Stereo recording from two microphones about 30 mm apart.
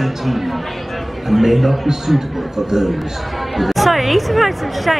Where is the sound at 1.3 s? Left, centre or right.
Centre.